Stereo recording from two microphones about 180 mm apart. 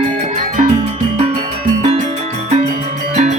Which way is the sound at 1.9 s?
35° right (ahead or behind).